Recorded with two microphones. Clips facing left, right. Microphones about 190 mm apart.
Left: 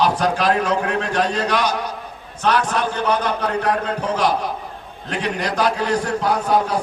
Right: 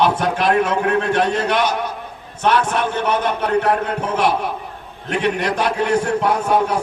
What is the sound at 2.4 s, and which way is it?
A man's voice, 25° right (ahead or behind).